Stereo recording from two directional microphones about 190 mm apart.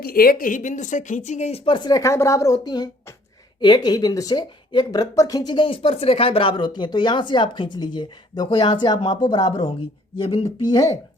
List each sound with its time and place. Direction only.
0.0 s a woman's voice: 50° left (ahead or behind); by 10.9 s 20° left (ahead or behind)